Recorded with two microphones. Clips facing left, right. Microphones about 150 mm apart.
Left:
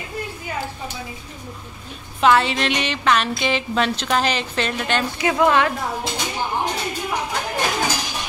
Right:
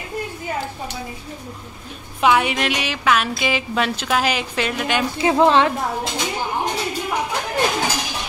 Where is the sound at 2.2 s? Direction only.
10° right (ahead or behind).